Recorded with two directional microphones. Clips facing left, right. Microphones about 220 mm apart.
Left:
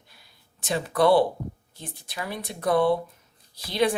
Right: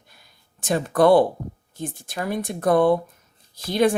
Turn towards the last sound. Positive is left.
turn(degrees=-50)  # may be behind; listen again after turning